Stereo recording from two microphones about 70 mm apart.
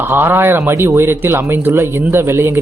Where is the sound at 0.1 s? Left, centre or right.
Right.